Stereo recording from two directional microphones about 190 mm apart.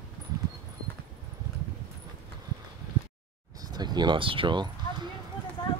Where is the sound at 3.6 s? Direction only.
20° right (ahead or behind).